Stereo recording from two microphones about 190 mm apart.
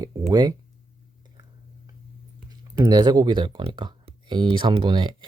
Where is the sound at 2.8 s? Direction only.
20° right (ahead or behind).